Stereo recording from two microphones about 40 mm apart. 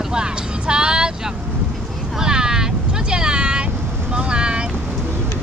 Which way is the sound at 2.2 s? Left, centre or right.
Centre.